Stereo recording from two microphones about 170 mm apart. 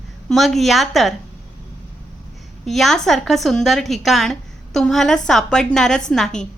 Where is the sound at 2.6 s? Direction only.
Centre (ahead or behind).